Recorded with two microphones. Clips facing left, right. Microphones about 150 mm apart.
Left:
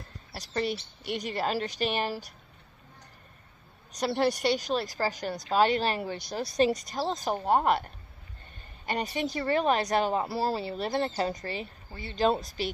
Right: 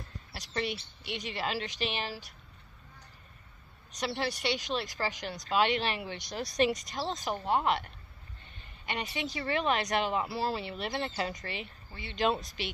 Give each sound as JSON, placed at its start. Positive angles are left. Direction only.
{"t": 0.3, "sound": "speech", "side_deg": 40}
{"t": 4.0, "sound": "speech", "side_deg": 45}